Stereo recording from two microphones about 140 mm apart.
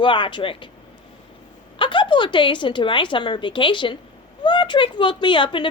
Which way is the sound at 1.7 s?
35° left (ahead or behind).